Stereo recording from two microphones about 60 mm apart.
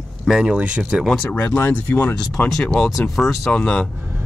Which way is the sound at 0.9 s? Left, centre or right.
Right.